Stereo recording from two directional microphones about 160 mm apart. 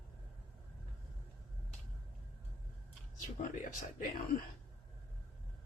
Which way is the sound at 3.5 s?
55° left (ahead or behind).